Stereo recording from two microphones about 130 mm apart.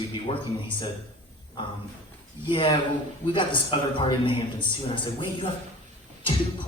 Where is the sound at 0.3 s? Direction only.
40° left (ahead or behind).